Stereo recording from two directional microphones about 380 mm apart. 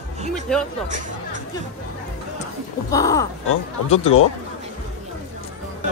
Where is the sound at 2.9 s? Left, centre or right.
Centre.